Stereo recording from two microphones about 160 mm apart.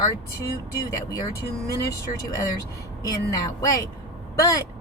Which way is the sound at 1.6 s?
20° left (ahead or behind).